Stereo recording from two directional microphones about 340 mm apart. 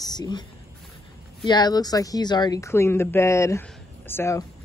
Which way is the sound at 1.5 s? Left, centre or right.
Centre.